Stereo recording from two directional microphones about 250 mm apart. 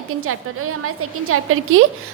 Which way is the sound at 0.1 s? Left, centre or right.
Right.